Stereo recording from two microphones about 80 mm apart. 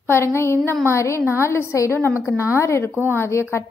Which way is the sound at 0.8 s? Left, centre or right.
Left.